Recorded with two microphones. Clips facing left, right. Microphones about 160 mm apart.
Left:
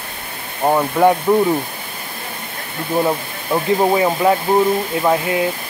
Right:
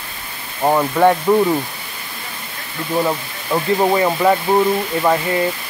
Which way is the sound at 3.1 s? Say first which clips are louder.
Left 1 dB; 10° left (ahead or behind).